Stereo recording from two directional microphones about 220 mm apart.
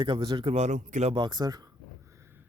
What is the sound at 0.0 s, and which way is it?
A man's voice, 20° right (ahead or behind).